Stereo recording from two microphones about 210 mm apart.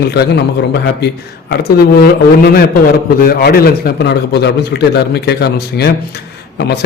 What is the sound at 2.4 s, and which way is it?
A man's voice, 45° left (ahead or behind).